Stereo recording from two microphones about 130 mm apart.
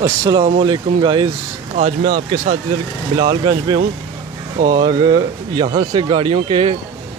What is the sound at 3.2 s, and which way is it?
Speech, 40° right (ahead or behind).